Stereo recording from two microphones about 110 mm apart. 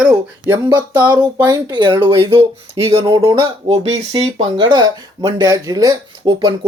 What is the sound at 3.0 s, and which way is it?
Speech, 45° right (ahead or behind).